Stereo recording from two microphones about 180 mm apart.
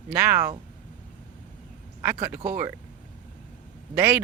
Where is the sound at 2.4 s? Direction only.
10° right (ahead or behind).